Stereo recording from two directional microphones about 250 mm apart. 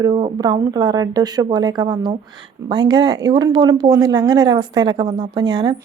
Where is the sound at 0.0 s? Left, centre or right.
Centre.